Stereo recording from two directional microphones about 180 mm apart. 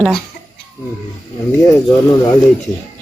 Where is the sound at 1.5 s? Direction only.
15° left (ahead or behind).